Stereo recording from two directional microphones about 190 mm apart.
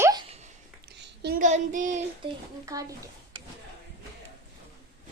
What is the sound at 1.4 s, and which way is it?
Child singing, 40° right (ahead or behind).